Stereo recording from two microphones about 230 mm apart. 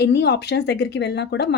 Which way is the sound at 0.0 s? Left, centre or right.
Left.